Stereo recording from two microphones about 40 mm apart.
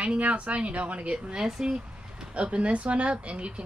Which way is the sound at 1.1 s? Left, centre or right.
Centre.